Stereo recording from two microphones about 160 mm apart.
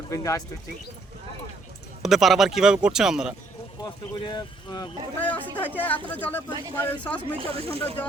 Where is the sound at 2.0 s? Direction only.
Centre (ahead or behind).